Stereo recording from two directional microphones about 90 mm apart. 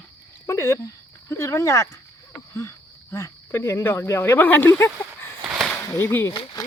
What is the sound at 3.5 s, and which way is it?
Speech, 30° left (ahead or behind).